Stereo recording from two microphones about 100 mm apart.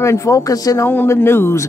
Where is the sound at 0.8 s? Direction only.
25° left (ahead or behind).